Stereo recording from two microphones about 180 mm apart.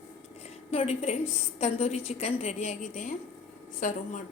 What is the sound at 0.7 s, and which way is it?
A woman's voice, 35° left (ahead or behind).